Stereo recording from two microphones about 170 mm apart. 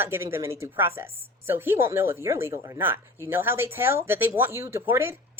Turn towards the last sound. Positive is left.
turn(degrees=-15)  # may be behind; listen again after turning